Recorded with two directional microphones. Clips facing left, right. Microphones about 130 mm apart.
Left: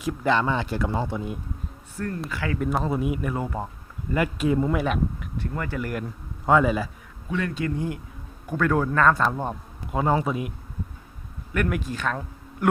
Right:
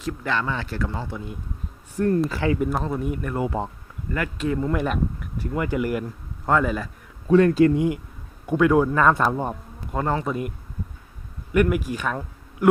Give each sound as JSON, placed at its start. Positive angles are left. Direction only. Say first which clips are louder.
{"t": 0.0, "sound": "speech", "louder": "left 3 dB", "side_deg": 10}
{"t": 2.0, "sound": "speech", "louder": "right 9 dB", "side_deg": -20}
{"t": 2.6, "sound": "a man's voice", "louder": "even", "side_deg": 0}
{"t": 5.4, "sound": "speech", "louder": "right 5 dB", "side_deg": -10}
{"t": 6.4, "sound": "a man's voice", "louder": "left 2 dB", "side_deg": 5}
{"t": 7.3, "sound": "speech", "louder": "right 12 dB", "side_deg": -40}
{"t": 8.4, "sound": "speech", "louder": "right 5 dB", "side_deg": -15}
{"t": 9.9, "sound": "a man's voice", "louder": "left 1 dB", "side_deg": 10}
{"t": 11.5, "sound": "speech", "louder": "right 6 dB", "side_deg": -10}